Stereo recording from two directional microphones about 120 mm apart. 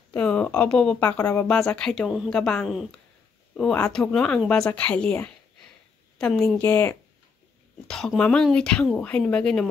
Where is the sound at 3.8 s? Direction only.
5° left (ahead or behind).